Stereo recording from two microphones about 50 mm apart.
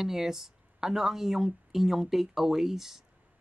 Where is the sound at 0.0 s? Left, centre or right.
Centre.